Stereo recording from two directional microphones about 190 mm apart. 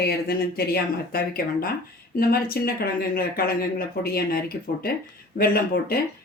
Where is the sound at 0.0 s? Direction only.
55° left (ahead or behind).